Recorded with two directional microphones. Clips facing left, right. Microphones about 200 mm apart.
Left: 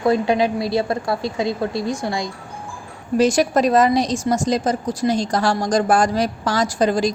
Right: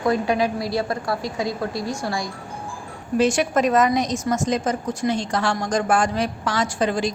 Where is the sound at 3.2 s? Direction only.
40° left (ahead or behind).